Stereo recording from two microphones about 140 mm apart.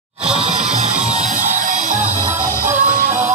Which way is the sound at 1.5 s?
65° right (ahead or behind).